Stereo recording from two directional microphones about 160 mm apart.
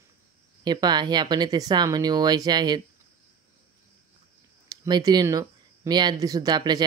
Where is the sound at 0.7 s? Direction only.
25° right (ahead or behind).